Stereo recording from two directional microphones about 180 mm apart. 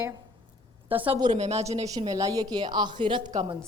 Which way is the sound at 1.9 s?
20° right (ahead or behind).